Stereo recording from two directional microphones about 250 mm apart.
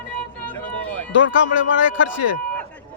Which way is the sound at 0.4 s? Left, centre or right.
Centre.